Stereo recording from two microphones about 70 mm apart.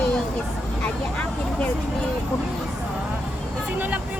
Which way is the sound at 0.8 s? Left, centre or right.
Left.